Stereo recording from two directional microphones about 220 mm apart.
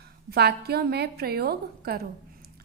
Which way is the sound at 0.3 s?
45° right (ahead or behind).